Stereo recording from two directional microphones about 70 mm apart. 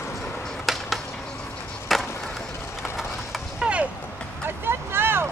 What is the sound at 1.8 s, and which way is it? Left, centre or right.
Skateboard, centre.